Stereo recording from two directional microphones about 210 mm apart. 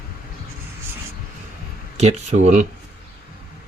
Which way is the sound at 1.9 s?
35° right (ahead or behind).